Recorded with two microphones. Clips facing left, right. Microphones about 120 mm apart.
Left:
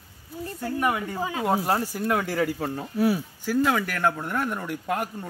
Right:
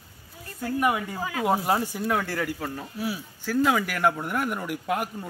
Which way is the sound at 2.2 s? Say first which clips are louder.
Left 4 dB; 25° left (ahead or behind).